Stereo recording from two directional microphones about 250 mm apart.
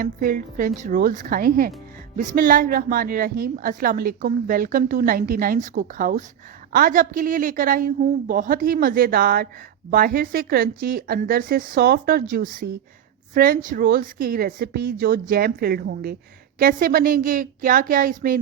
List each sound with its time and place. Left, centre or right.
0.0 s a woman's voice: right